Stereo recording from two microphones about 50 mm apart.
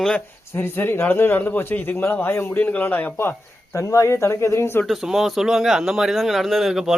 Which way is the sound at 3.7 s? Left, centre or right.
Left.